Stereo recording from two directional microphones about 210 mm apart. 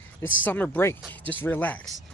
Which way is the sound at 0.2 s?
65° left (ahead or behind).